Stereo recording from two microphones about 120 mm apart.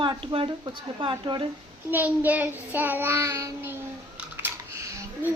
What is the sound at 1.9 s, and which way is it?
Child singing, 15° right (ahead or behind).